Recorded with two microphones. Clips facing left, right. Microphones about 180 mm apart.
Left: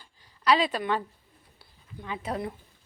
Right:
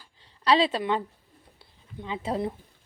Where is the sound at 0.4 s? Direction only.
30° right (ahead or behind).